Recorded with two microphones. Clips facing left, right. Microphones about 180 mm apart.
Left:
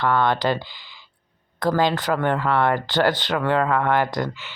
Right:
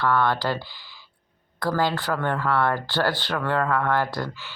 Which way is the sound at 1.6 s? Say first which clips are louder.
Left 4 dB; 20° left (ahead or behind).